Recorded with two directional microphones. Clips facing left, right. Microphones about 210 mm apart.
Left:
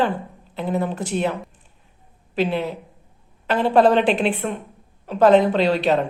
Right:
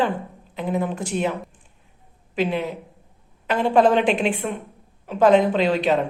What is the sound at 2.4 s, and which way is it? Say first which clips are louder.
Speech: left 1 dB; centre (ahead or behind).